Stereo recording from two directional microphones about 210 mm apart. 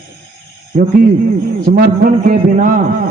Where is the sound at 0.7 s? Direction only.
45° right (ahead or behind).